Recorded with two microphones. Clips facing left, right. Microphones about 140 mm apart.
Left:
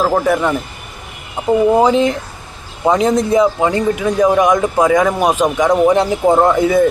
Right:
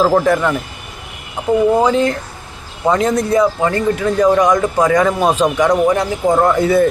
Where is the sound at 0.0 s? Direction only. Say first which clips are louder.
Right 2 dB; centre (ahead or behind).